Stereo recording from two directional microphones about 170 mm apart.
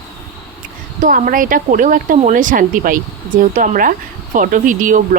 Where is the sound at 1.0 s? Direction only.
55° right (ahead or behind).